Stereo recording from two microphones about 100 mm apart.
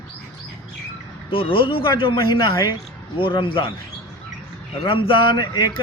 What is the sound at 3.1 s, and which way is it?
Speech, 60° left (ahead or behind).